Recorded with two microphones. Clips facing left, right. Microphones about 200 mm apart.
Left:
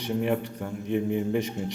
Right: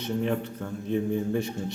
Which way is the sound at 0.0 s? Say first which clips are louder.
Left 1 dB; 15° left (ahead or behind).